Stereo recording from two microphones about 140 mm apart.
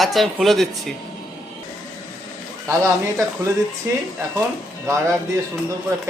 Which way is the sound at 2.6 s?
25° right (ahead or behind).